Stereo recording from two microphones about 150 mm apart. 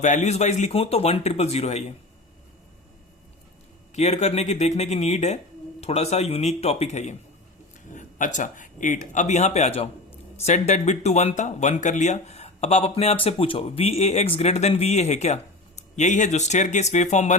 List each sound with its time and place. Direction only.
0.0 s speech: 55° left (ahead or behind)
3.9 s speech: 50° left (ahead or behind)